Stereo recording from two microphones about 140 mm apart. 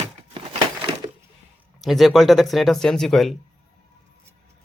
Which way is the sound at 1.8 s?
Centre (ahead or behind).